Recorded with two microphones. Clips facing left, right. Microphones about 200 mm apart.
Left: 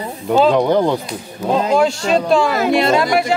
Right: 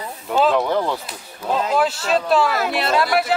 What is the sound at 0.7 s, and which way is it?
Speech, 30° left (ahead or behind).